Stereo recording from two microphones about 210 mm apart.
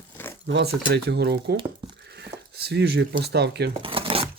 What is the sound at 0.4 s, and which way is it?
Speech, 55° right (ahead or behind).